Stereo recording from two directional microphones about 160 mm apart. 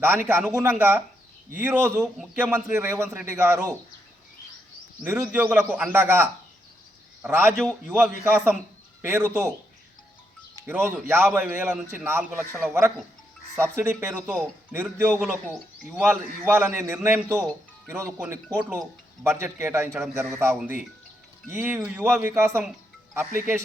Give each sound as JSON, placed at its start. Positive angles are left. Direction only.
{"t": 0.0, "sound": "a man's voice", "side_deg": -15}
{"t": 5.0, "sound": "a man's voice", "side_deg": -5}
{"t": 10.7, "sound": "a man's voice", "side_deg": -15}
{"t": 21.5, "sound": "a man's voice", "side_deg": -10}